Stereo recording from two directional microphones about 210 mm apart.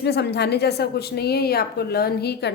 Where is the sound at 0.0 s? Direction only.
55° left (ahead or behind).